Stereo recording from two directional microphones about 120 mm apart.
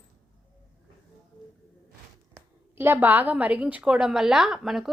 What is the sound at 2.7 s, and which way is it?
A woman's voice, 20° right (ahead or behind).